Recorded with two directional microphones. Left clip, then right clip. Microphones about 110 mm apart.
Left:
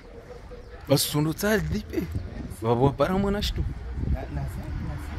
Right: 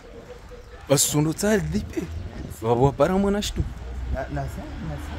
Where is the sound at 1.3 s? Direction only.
15° right (ahead or behind).